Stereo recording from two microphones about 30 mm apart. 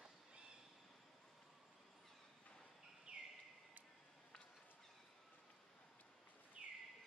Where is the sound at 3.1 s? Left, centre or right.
Right.